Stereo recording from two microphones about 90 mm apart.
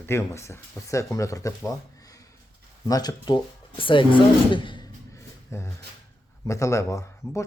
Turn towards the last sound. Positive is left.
turn(degrees=35)  # may be behind; listen again after turning